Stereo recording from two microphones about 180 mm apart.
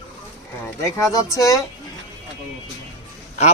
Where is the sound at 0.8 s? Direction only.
15° left (ahead or behind).